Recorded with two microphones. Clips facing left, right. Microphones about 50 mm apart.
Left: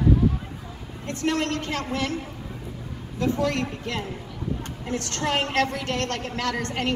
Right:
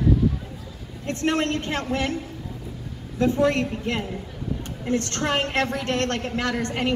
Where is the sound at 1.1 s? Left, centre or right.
Right.